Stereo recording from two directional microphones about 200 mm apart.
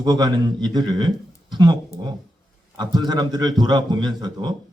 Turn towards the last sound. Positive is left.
turn(degrees=-20)  # may be behind; listen again after turning